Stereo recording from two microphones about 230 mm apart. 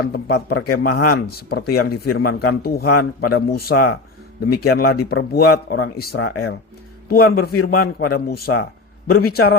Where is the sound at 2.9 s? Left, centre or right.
Left.